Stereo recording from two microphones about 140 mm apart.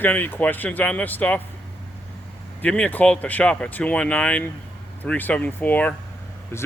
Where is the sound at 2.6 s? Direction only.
10° left (ahead or behind).